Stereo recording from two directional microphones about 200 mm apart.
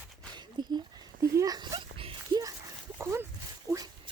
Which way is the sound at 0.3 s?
20° right (ahead or behind).